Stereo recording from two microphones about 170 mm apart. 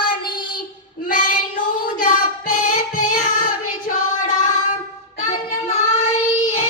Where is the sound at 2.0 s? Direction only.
50° left (ahead or behind).